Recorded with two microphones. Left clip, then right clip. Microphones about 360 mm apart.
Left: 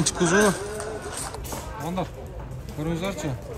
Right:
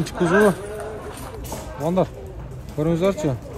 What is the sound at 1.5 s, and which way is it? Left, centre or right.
Music, centre.